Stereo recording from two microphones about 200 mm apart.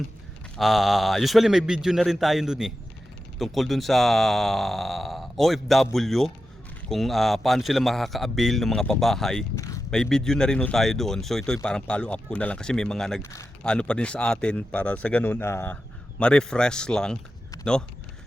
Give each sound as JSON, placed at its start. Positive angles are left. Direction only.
{"t": 0.5, "sound": "a man's voice", "side_deg": 0}
{"t": 9.6, "sound": "a sound", "side_deg": 15}
{"t": 9.9, "sound": "a man's voice", "side_deg": 5}